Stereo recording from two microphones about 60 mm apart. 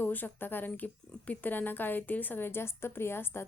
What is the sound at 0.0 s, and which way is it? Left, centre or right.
A woman's voice, left.